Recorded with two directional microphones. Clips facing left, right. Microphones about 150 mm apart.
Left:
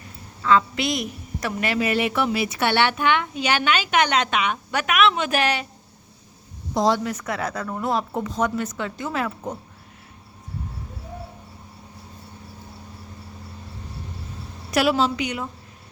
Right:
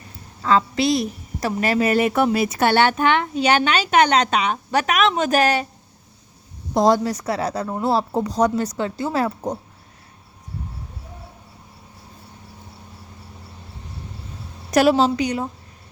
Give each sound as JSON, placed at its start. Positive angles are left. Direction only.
{"t": 0.4, "sound": "a woman's voice", "side_deg": -35}
{"t": 6.7, "sound": "a woman's voice", "side_deg": -50}
{"t": 7.0, "sound": "a woman's voice", "side_deg": -35}
{"t": 14.7, "sound": "a woman's voice", "side_deg": -40}